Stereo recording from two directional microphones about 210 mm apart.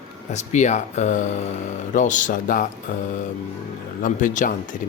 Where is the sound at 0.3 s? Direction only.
35° left (ahead or behind).